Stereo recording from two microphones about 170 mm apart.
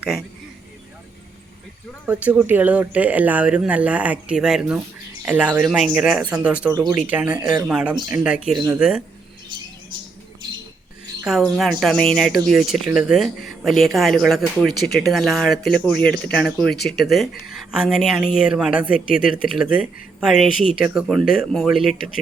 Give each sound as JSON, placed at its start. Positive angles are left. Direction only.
{"t": 2.0, "sound": "speech", "side_deg": -10}
{"t": 8.5, "sound": "speech", "side_deg": -15}
{"t": 8.8, "sound": "speech", "side_deg": -5}
{"t": 11.2, "sound": "speech", "side_deg": 0}
{"t": 18.9, "sound": "speech", "side_deg": 55}
{"t": 19.5, "sound": "speech", "side_deg": -5}